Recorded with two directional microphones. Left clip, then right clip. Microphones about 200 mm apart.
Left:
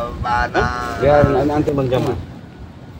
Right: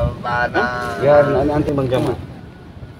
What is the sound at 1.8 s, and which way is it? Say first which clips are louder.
Speech: even; 15° right (ahead or behind).